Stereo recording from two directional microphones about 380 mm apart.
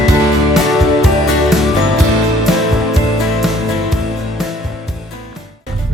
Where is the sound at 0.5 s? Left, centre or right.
Centre.